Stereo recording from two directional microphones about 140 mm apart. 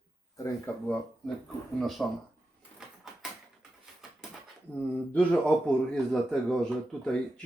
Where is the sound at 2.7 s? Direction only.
5° right (ahead or behind).